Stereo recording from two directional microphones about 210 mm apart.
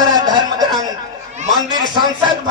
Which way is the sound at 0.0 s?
20° right (ahead or behind).